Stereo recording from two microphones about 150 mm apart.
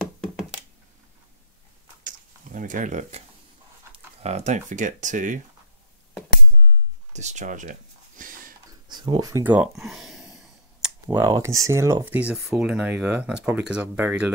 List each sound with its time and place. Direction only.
0.0 s hands: centre (ahead or behind)
2.0 s a sound: 60° right (ahead or behind)
3.9 s speech: 45° right (ahead or behind)
7.1 s speech: 50° right (ahead or behind)
8.2 s a sound: 60° right (ahead or behind)
8.8 s speech: 30° right (ahead or behind)
9.4 s speech: 10° right (ahead or behind)
9.7 s a sound: centre (ahead or behind)
11.1 s speech: 25° right (ahead or behind)